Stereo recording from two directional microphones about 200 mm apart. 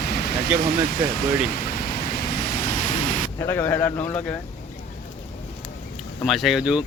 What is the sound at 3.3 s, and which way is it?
Speech, 15° left (ahead or behind).